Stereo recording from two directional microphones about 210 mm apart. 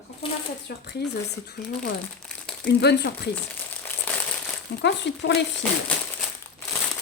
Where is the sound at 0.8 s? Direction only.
50° left (ahead or behind).